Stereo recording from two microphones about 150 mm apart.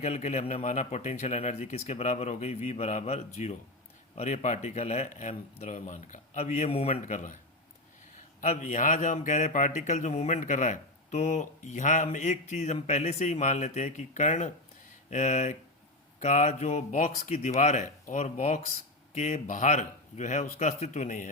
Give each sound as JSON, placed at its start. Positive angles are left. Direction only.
{"t": 0.0, "sound": "a man's voice", "side_deg": 50}
{"t": 8.4, "sound": "a man's voice", "side_deg": 50}